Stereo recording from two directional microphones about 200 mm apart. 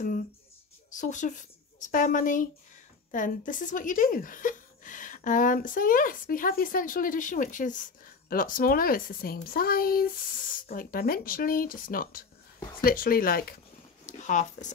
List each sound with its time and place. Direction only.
0.8 s speech: 40° left (ahead or behind)